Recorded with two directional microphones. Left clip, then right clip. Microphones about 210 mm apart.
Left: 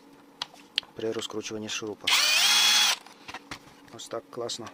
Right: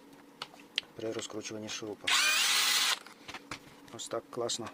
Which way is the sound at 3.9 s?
Centre (ahead or behind).